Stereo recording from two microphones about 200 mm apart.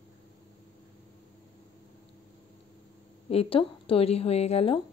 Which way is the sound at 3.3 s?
30° left (ahead or behind).